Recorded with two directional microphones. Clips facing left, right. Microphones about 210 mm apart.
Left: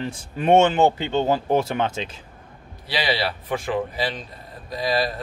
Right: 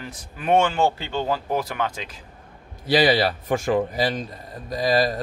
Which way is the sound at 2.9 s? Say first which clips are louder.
Right 6 dB; 45° right (ahead or behind).